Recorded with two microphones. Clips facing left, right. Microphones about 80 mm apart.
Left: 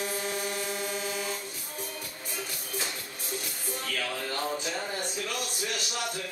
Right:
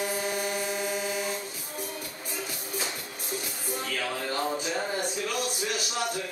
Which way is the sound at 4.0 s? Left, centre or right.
Centre.